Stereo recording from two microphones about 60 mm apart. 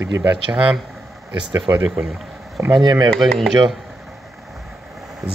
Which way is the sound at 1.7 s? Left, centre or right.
Right.